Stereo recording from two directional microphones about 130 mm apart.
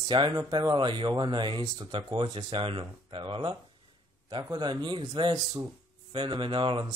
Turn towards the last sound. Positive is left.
turn(degrees=-40)  # may be behind; listen again after turning